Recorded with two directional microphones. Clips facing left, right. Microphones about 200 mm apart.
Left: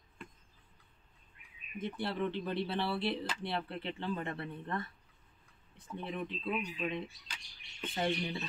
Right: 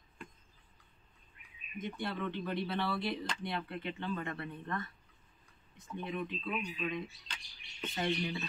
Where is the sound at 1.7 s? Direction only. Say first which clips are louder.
Left 2 dB; 30° left (ahead or behind).